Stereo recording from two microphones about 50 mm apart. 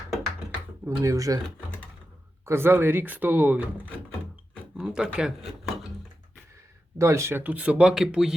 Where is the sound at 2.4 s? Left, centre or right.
Right.